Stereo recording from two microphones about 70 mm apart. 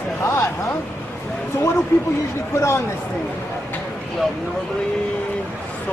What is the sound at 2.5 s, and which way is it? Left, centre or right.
Speech, left.